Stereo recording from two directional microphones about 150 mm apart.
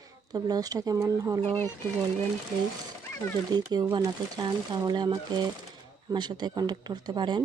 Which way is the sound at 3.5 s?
25° right (ahead or behind).